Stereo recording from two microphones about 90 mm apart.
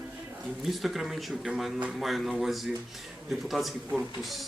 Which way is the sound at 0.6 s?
Centre (ahead or behind).